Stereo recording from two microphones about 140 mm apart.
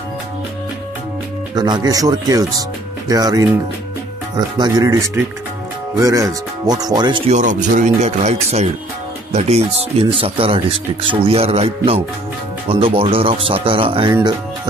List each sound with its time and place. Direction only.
1.5 s speech: 30° right (ahead or behind)
4.6 s speech: 30° right (ahead or behind)
7.0 s speech: 35° right (ahead or behind)
7.2 s speech: 65° right (ahead or behind); by 14.1 s 40° right (ahead or behind)